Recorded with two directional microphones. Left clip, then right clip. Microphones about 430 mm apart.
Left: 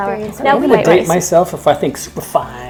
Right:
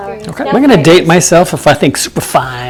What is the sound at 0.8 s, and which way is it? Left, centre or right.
Speech, right.